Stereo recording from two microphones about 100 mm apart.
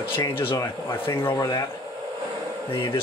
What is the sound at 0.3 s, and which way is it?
Speech, 60° left (ahead or behind).